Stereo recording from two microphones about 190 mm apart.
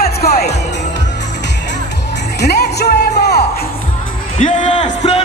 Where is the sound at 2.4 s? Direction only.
60° left (ahead or behind).